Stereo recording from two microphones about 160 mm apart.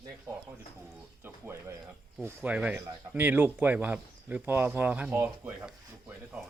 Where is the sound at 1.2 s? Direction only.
15° right (ahead or behind).